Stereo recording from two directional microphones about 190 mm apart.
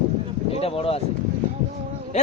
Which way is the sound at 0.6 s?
30° left (ahead or behind).